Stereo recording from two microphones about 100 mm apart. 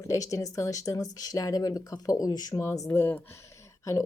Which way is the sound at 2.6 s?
30° left (ahead or behind).